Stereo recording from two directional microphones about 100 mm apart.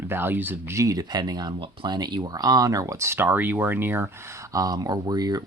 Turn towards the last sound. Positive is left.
turn(degrees=-40)  # may be behind; listen again after turning